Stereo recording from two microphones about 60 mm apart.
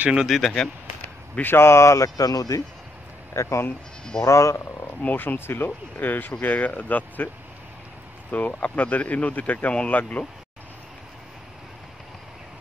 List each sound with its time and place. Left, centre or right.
0.3 s speech: centre
1.3 s speech: left
2.0 s speech: left
3.3 s speech: left
5.0 s speech: left
8.3 s speech: left